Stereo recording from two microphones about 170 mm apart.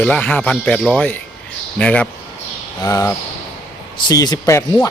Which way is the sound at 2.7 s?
20° left (ahead or behind).